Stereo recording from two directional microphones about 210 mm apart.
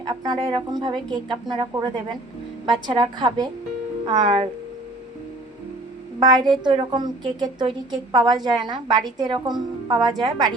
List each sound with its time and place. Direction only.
0.0 s a woman's voice: 20° right (ahead or behind)
2.6 s a woman's voice: 20° right (ahead or behind)
6.1 s a woman's voice: 20° right (ahead or behind)